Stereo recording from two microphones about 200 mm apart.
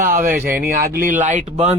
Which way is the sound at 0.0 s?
45° right (ahead or behind).